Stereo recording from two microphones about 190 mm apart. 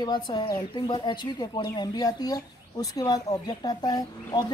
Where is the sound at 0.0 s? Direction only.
20° left (ahead or behind).